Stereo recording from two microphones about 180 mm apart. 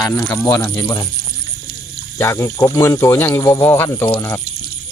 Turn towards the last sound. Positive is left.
turn(degrees=15)  # may be behind; listen again after turning